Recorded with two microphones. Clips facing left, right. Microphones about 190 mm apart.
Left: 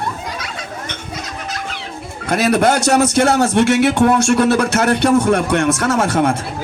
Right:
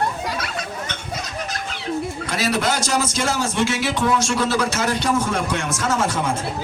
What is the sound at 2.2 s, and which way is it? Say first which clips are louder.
Speech: left 10 dB; 55° left (ahead or behind).